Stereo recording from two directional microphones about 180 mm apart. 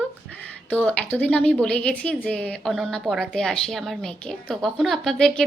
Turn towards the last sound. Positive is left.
turn(degrees=5)  # may be behind; listen again after turning